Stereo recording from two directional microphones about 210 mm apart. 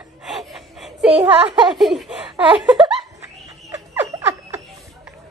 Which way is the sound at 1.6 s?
Centre (ahead or behind).